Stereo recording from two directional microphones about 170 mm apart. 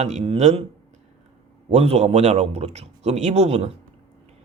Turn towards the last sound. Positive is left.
turn(degrees=-40)  # may be behind; listen again after turning